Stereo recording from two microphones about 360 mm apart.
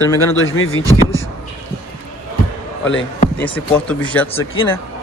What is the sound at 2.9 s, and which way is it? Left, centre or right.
Speech, left.